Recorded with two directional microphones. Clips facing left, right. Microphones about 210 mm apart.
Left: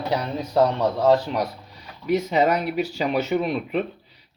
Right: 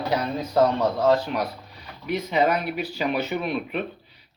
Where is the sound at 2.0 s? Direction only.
40° left (ahead or behind).